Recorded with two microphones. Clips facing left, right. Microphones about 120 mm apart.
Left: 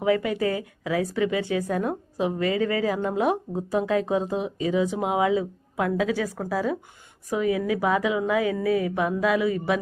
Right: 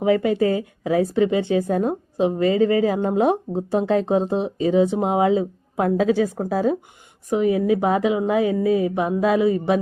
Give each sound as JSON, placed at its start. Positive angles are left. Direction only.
{"t": 0.0, "sound": "a woman's voice", "side_deg": -30}